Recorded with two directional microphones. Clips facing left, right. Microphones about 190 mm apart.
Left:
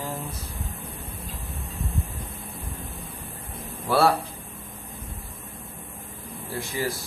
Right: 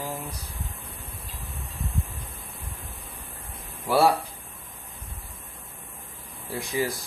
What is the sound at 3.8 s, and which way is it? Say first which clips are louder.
Speech: even; 15° right (ahead or behind).